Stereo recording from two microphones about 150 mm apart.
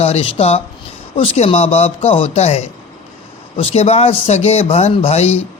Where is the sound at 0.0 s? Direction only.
45° left (ahead or behind).